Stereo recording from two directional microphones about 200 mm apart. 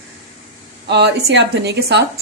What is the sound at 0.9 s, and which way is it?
A woman's voice, 60° right (ahead or behind).